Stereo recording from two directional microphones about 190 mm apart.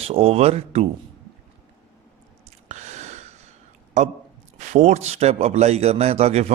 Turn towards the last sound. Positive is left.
turn(degrees=-35)  # may be behind; listen again after turning